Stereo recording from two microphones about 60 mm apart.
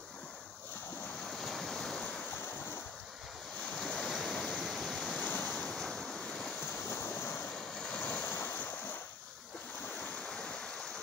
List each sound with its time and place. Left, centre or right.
1.2 s waves: centre
3.7 s waves: centre
6.7 s waves: left
7.5 s vehicle: centre
8.2 s waves: left
10.2 s stream: centre